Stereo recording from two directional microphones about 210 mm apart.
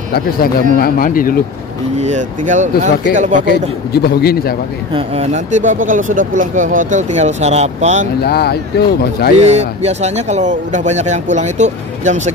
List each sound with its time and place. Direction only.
0.7 s speech: 45° left (ahead or behind)
2.0 s speech: 35° right (ahead or behind)
3.9 s speech: 50° left (ahead or behind)
4.9 s speech: 30° right (ahead or behind)
8.2 s speech: 50° left (ahead or behind)
9.5 s speech: 30° right (ahead or behind)